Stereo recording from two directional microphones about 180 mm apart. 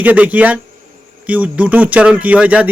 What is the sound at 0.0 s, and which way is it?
Speech, 10° right (ahead or behind).